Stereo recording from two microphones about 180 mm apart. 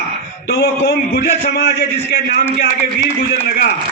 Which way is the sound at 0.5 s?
65° left (ahead or behind).